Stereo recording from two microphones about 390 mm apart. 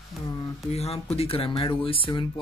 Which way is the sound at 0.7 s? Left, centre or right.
Centre.